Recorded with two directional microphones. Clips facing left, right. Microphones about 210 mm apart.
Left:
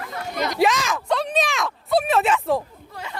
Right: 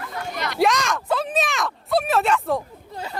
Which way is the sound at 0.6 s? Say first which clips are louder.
Right 1 dB; centre (ahead or behind).